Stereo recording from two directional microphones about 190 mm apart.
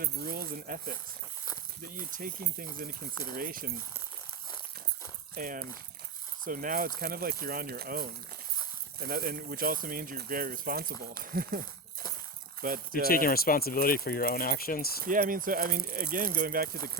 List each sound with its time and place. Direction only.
0.0 s speech: 50° right (ahead or behind)
5.3 s speech: 45° right (ahead or behind)
12.9 s speech: 50° left (ahead or behind)
15.0 s speech: 45° right (ahead or behind)